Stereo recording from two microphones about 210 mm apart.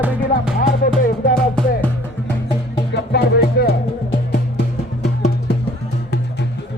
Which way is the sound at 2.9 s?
50° left (ahead or behind).